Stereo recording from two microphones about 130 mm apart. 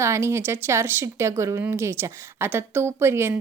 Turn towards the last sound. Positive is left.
turn(degrees=-20)  # may be behind; listen again after turning